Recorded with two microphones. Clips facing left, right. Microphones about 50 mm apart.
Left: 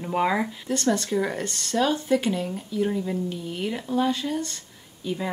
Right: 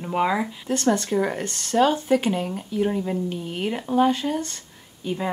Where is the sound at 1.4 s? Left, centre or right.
Right.